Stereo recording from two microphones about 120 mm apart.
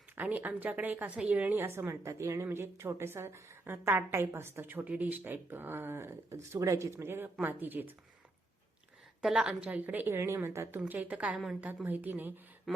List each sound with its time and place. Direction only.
0.2 s a woman's voice: 15° right (ahead or behind)
9.2 s a woman's voice: 5° right (ahead or behind)
12.7 s a sound: centre (ahead or behind)